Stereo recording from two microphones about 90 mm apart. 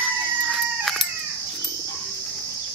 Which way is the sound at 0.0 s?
Centre (ahead or behind).